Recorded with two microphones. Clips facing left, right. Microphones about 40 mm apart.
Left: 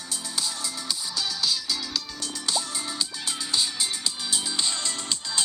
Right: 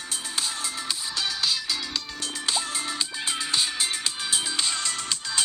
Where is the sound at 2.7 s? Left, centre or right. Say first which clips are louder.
Right 2 dB; right.